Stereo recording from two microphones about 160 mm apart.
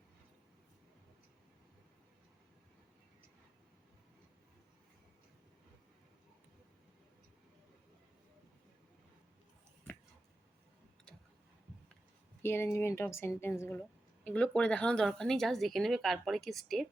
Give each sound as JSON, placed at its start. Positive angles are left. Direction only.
{"t": 12.4, "sound": "a woman's voice", "side_deg": 15}